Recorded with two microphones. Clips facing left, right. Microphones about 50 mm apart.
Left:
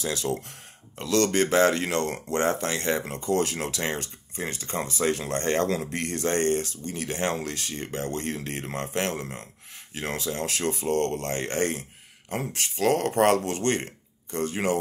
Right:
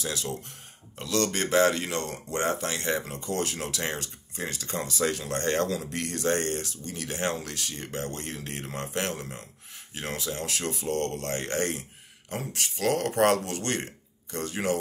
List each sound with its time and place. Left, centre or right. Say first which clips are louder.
0.0 s speech: left 4 dB; left